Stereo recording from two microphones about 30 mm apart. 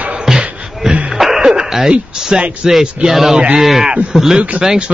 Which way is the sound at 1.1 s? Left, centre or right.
Centre.